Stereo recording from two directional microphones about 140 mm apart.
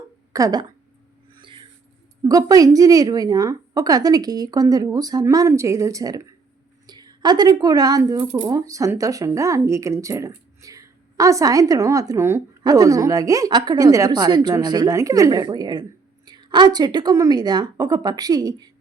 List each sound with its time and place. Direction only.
0.3 s a woman's voice: 25° right (ahead or behind)
1.4 s a sound: 35° right (ahead or behind)
2.2 s a woman's voice: 25° right (ahead or behind)